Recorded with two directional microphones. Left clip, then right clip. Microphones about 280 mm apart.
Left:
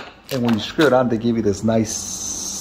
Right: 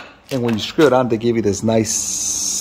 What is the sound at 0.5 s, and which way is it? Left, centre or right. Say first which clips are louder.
Speech: right 2 dB; right.